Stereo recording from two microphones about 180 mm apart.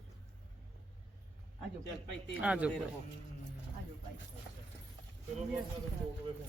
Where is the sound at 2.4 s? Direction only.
5° right (ahead or behind).